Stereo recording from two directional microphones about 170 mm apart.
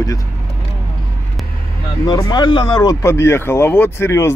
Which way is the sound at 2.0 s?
25° left (ahead or behind).